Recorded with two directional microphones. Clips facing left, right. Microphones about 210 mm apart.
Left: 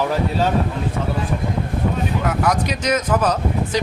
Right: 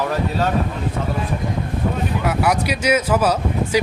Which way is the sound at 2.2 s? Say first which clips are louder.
Right 2 dB; 10° right (ahead or behind).